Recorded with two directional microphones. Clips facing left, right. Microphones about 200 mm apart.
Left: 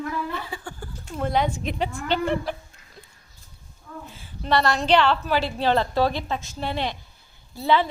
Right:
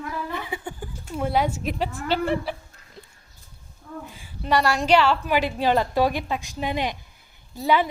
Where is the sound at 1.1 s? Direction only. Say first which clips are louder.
Even; 10° right (ahead or behind).